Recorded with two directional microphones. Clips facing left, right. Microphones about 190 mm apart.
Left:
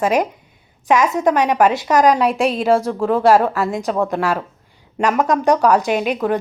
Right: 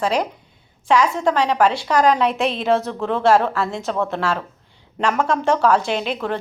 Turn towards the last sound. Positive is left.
turn(degrees=15)  # may be behind; listen again after turning